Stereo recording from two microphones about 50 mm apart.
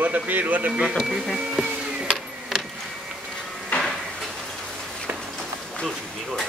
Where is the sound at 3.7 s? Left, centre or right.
Left.